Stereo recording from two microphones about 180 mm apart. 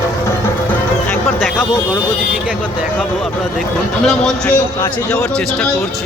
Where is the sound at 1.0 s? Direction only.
Centre (ahead or behind).